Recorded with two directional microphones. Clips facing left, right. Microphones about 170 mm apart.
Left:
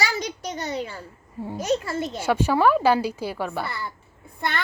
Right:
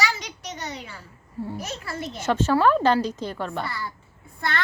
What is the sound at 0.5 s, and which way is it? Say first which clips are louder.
Speech: left 5 dB; 35° left (ahead or behind).